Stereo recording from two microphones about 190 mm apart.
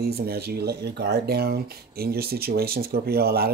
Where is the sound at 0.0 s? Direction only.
55° right (ahead or behind).